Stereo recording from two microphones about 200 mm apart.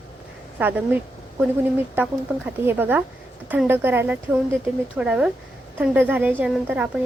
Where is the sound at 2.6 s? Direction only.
10° right (ahead or behind).